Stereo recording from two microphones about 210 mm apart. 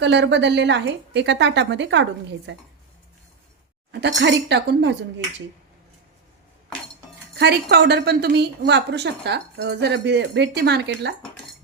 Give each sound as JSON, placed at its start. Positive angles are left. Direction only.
{"t": 0.0, "sound": "a woman's voice", "side_deg": -55}
{"t": 4.2, "sound": "a woman's voice", "side_deg": -55}
{"t": 7.3, "sound": "a woman's voice", "side_deg": -50}